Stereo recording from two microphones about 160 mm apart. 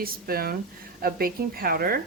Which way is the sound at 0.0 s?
70° right (ahead or behind).